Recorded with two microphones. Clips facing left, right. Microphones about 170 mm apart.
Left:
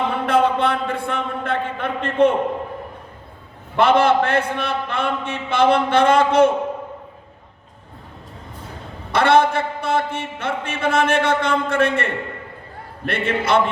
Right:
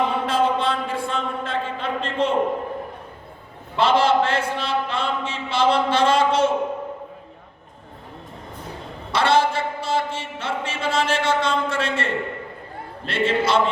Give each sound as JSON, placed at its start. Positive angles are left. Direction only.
{"t": 0.3, "sound": "a sound", "side_deg": 60}
{"t": 3.8, "sound": "a man's voice", "side_deg": 55}
{"t": 9.1, "sound": "a man's voice", "side_deg": 55}